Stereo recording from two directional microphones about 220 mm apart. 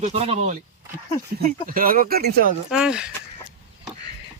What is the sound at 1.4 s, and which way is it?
Speech, 40° right (ahead or behind).